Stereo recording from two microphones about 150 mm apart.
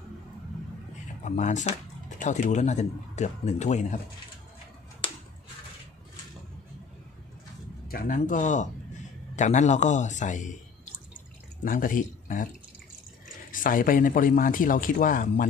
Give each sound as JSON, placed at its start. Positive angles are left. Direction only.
{"t": 1.2, "sound": "speech", "side_deg": 55}
{"t": 7.9, "sound": "speech", "side_deg": 70}
{"t": 11.6, "sound": "speech", "side_deg": 65}
{"t": 13.5, "sound": "speech", "side_deg": 65}